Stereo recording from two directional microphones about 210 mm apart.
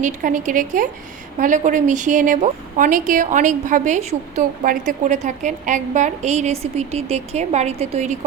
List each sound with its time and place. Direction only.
0.0 s a woman's voice: 40° right (ahead or behind)